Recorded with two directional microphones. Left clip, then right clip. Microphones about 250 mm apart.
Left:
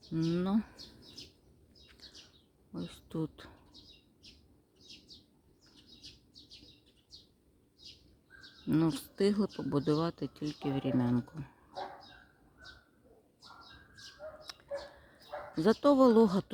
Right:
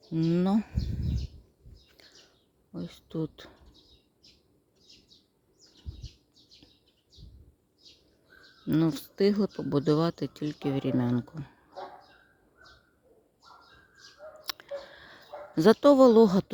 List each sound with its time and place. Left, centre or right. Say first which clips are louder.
0.1 s speech: right 5 dB; centre
2.7 s speech: right 4 dB; centre
8.6 s speech: right 4 dB; centre
14.4 s a sound: right 6 dB; right
15.5 s speech: right 7 dB; right